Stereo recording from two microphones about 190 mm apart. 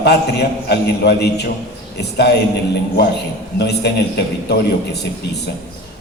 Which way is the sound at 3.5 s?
60° left (ahead or behind).